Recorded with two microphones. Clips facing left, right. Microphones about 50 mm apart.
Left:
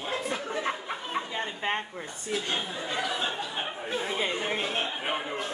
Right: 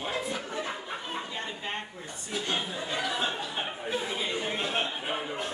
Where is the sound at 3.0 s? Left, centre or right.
Centre.